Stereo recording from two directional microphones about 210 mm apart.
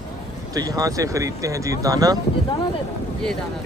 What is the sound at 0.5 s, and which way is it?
Speech, 15° right (ahead or behind).